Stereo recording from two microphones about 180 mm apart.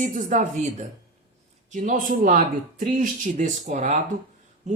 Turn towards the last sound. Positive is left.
turn(degrees=-40)  # may be behind; listen again after turning